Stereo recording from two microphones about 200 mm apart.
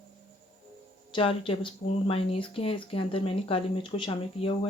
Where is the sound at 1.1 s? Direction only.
25° left (ahead or behind).